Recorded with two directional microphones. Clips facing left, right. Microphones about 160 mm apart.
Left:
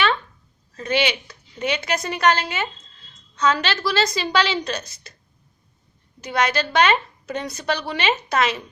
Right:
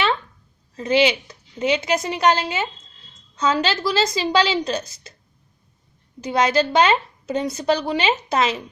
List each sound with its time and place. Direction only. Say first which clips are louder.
0.8 s a woman's voice: right 4 dB; 25° right (ahead or behind)
6.2 s a woman's voice: right 4 dB; 25° right (ahead or behind)